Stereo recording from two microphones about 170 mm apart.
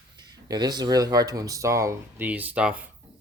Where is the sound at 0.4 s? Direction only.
25° right (ahead or behind); by 2.8 s 10° right (ahead or behind).